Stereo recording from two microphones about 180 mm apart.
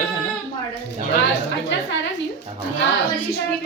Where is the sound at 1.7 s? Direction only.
90° left.